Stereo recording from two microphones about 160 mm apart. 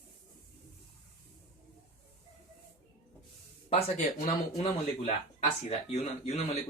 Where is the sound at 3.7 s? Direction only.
45° left (ahead or behind).